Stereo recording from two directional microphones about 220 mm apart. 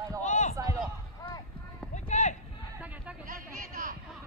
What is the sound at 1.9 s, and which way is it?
Run, 35° left (ahead or behind).